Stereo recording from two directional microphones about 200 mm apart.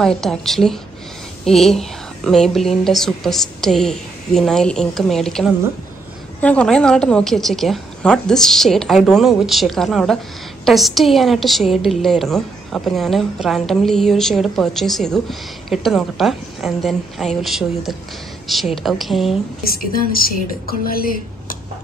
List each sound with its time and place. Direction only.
0.0 s a woman's voice: centre (ahead or behind)
19.7 s speech: 45° left (ahead or behind)